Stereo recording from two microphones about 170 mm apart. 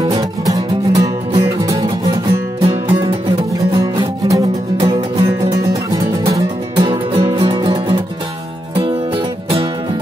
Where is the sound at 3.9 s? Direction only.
20° right (ahead or behind).